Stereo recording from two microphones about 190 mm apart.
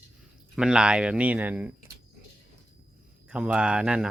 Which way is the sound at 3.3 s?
5° right (ahead or behind).